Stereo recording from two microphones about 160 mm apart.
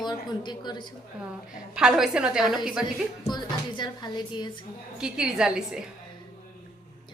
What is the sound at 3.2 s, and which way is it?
Speech, 25° left (ahead or behind).